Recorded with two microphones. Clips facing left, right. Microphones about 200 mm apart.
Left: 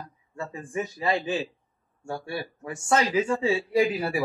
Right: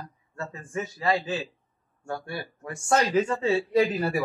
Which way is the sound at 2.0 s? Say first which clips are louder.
Left 1 dB; 5° left (ahead or behind).